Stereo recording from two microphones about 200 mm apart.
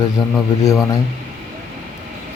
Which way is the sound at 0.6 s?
15° left (ahead or behind).